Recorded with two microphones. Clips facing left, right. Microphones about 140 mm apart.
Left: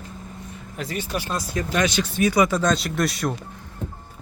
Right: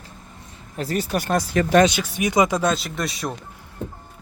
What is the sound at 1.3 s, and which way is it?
Speech, 65° right (ahead or behind).